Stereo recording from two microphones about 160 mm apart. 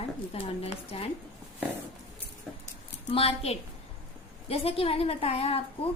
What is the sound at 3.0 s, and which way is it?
A woman's voice, 35° left (ahead or behind).